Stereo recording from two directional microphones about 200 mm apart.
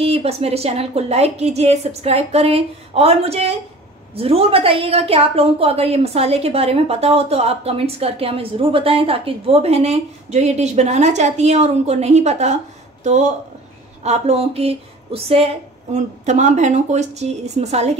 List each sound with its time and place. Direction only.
0.0 s a woman's voice: 30° right (ahead or behind)